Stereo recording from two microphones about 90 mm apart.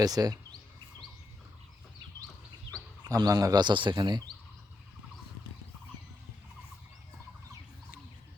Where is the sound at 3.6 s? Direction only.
60° right (ahead or behind).